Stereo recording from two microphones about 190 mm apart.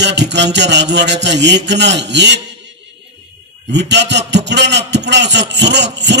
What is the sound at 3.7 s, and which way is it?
A man's voice, 65° right (ahead or behind).